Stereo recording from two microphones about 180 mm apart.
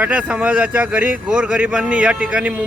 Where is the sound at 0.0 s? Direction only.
5° right (ahead or behind).